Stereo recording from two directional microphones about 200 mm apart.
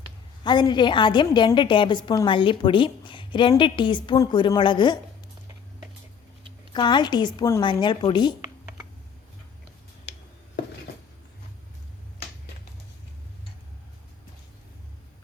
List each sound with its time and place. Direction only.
0.4 s a woman's voice: 20° left (ahead or behind)
6.7 s a woman's voice: 20° left (ahead or behind)